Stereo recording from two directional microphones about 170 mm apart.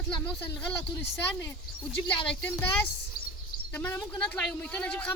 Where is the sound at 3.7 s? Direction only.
10° left (ahead or behind).